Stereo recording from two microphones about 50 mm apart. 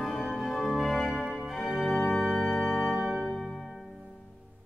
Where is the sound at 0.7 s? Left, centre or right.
Centre.